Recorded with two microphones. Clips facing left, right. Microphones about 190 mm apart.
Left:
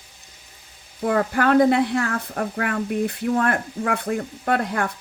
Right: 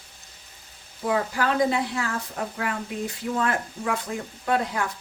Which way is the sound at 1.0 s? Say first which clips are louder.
Left 5 dB; 60° left (ahead or behind).